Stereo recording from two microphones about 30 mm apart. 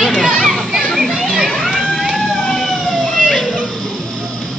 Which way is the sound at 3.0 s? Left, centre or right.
Centre.